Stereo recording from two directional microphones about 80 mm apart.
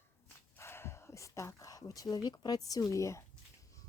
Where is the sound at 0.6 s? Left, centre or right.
Left.